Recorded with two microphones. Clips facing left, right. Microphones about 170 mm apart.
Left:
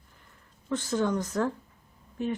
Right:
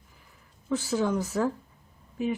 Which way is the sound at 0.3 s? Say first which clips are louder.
Right 2 dB; 5° right (ahead or behind).